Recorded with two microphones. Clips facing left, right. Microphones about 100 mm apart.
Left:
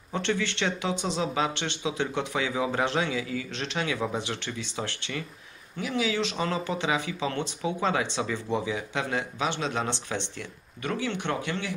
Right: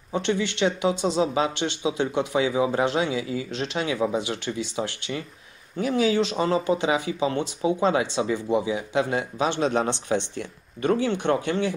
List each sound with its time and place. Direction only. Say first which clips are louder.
0.1 s speech: right 4 dB; 15° right (ahead or behind)
1.0 s speech: right 4 dB; 30° right (ahead or behind)
4.7 s speech: right 5 dB; 15° right (ahead or behind)
5.8 s speech: right 6 dB; 35° right (ahead or behind)
9.5 s speech: right 6 dB; 50° right (ahead or behind)
9.8 s speech: right 6 dB; 25° right (ahead or behind)